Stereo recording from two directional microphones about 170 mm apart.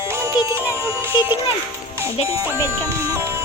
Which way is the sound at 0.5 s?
15° right (ahead or behind).